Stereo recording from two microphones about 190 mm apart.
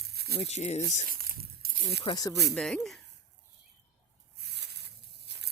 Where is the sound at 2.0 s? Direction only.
20° left (ahead or behind).